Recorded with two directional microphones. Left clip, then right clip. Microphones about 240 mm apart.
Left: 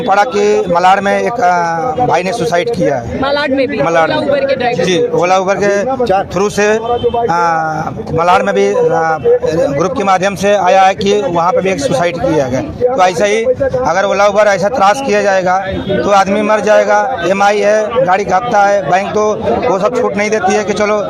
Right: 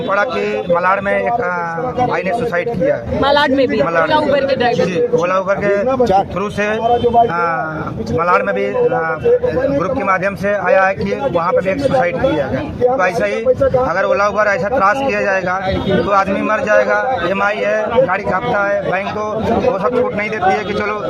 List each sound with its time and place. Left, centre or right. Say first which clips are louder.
0.1 s a man's voice: left 7 dB; left
3.2 s a man's voice: right 1 dB; centre
4.9 s a man's voice: left 4 dB; left
8.2 s a man's voice: left 5 dB; left
10.1 s a man's voice: left 7 dB; left
14.0 s a man's voice: left 8 dB; left